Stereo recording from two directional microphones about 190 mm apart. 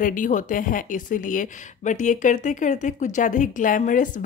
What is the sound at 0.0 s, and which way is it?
Speech, 45° left (ahead or behind).